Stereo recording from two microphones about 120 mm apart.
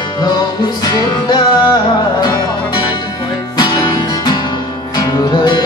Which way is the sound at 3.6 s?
40° left (ahead or behind).